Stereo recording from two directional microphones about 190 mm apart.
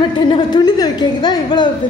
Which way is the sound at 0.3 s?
20° left (ahead or behind).